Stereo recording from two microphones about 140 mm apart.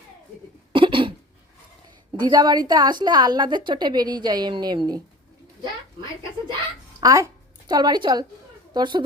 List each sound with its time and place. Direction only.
0.7 s hiccup: 35° right (ahead or behind)
2.1 s a woman's voice: 30° right (ahead or behind)
7.0 s a woman's voice: 25° right (ahead or behind)